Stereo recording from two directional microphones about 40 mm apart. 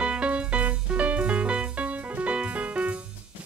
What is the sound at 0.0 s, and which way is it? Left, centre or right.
Music, right.